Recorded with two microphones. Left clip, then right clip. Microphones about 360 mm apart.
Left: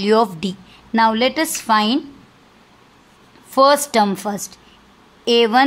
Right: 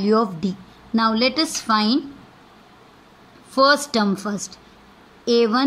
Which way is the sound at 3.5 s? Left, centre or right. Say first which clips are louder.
Left 3 dB; centre.